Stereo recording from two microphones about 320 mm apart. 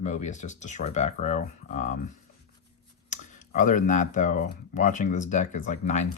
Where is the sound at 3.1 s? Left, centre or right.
Left.